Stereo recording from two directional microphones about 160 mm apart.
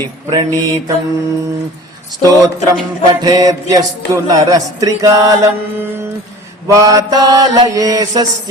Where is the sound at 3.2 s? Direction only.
25° right (ahead or behind).